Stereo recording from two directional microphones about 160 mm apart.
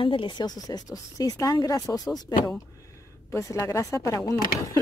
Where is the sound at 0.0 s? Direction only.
30° left (ahead or behind).